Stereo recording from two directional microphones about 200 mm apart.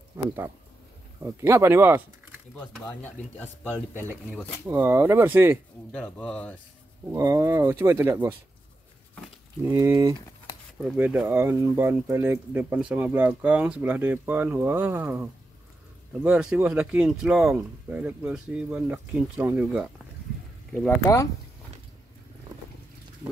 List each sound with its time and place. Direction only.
0.2 s speech: 15° right (ahead or behind)
2.5 s speech: 5° left (ahead or behind)
4.6 s speech: 10° right (ahead or behind)
5.9 s speech: 5° left (ahead or behind)
7.1 s speech: 15° right (ahead or behind)
9.7 s speech: 15° right (ahead or behind)
10.8 s speech: 5° right (ahead or behind)
20.7 s speech: 15° left (ahead or behind)